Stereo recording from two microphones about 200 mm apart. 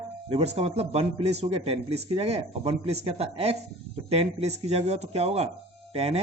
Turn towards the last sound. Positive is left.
turn(degrees=-30)  # may be behind; listen again after turning